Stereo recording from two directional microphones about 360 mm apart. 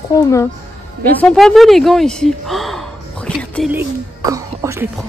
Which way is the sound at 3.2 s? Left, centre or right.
Centre.